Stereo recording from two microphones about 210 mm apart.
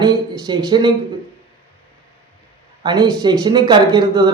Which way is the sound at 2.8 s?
20° right (ahead or behind).